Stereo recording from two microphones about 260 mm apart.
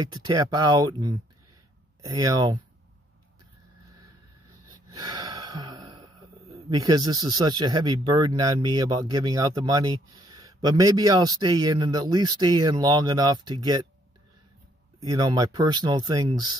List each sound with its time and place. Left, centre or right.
0.0 s speech: centre
4.7 s speech: centre
15.0 s speech: centre